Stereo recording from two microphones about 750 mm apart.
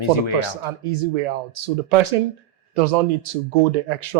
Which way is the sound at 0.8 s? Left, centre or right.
Right.